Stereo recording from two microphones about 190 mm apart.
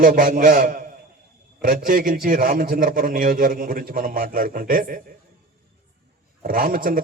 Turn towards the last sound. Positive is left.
turn(degrees=-50)  # may be behind; listen again after turning